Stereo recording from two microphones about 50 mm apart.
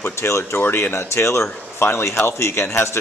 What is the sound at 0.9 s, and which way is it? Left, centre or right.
Speech, left.